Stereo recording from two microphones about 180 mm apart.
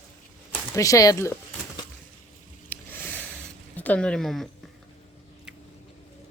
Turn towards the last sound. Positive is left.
turn(degrees=0)  # may be behind; listen again after turning